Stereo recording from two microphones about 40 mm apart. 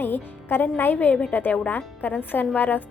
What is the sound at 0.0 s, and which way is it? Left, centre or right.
Speech, left.